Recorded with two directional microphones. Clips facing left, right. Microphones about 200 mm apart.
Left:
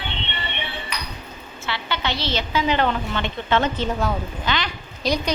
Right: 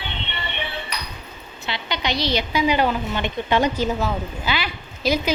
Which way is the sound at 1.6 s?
15° right (ahead or behind).